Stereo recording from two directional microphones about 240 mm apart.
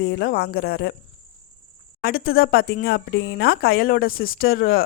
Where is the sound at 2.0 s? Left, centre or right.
Left.